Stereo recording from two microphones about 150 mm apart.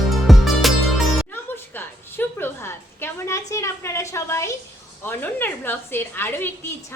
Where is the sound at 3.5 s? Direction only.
20° left (ahead or behind).